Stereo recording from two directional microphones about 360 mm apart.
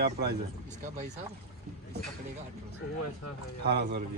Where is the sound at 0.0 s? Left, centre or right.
Right.